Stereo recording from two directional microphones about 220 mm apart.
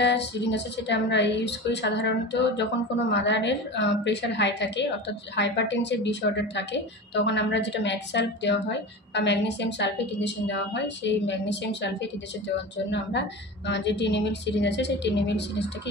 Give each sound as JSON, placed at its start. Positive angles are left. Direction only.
{"t": 0.0, "sound": "a woman's voice", "side_deg": 50}
{"t": 13.7, "sound": "a woman's voice", "side_deg": 50}